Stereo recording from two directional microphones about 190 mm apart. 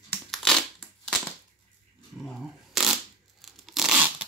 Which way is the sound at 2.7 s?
Centre (ahead or behind).